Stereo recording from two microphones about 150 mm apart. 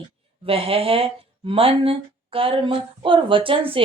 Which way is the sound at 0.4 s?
40° right (ahead or behind).